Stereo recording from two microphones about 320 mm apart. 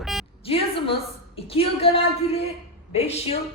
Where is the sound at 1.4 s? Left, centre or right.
Centre.